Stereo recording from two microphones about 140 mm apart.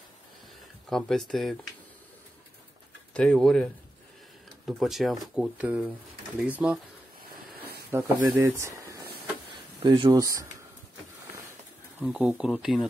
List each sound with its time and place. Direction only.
0.8 s speech: 5° left (ahead or behind)
3.1 s speech: 5° left (ahead or behind); by 6.8 s 10° right (ahead or behind)
7.9 s speech: 20° right (ahead or behind)
9.8 s speech: 35° right (ahead or behind)
12.0 s speech: 5° right (ahead or behind)